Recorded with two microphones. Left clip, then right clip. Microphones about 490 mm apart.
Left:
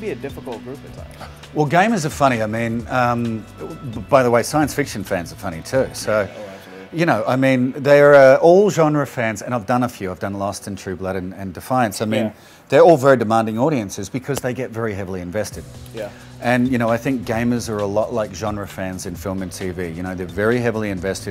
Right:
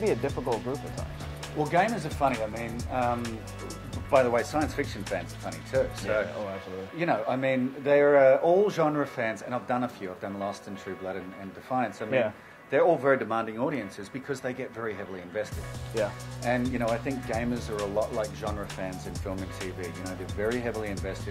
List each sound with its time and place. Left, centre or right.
0.0 s speech: right
1.6 s speech: left
3.2 s speech: centre
4.1 s speech: left
11.7 s speech: left
16.4 s speech: left
20.3 s speech: left